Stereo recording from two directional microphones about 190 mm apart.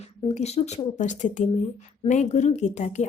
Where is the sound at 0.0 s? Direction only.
35° left (ahead or behind).